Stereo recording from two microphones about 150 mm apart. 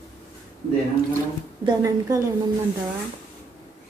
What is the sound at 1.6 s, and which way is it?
Speech, 25° right (ahead or behind).